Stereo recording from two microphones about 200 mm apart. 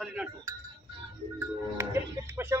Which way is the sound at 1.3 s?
10° right (ahead or behind).